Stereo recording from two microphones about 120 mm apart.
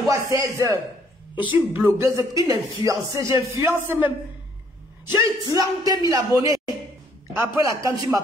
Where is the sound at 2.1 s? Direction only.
30° right (ahead or behind).